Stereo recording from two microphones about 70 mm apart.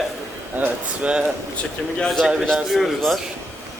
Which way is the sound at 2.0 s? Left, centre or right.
Centre.